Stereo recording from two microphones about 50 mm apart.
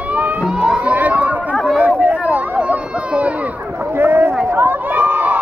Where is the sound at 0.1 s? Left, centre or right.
Right.